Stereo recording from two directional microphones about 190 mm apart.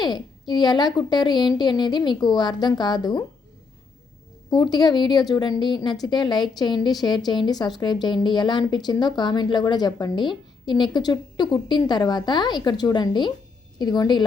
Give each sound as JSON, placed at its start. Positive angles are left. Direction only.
{"t": 0.0, "sound": "speech", "side_deg": 20}
{"t": 4.5, "sound": "speech", "side_deg": 20}